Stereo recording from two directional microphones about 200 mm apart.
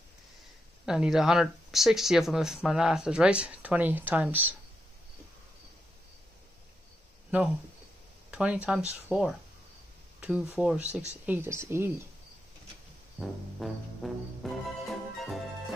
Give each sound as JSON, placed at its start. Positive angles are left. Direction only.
{"t": 0.8, "sound": "speech", "side_deg": -5}
{"t": 7.2, "sound": "speech", "side_deg": -5}
{"t": 13.2, "sound": "speech", "side_deg": 0}